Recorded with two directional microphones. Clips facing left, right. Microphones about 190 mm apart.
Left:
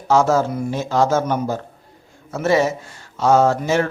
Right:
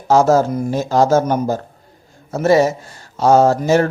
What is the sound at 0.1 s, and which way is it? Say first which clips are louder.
Speech: right 4 dB; 40° right (ahead or behind).